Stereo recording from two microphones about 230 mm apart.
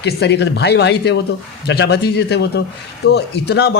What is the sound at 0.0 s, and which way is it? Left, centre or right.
Speech, left.